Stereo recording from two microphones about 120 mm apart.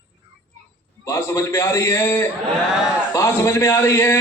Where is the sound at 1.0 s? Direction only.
25° left (ahead or behind).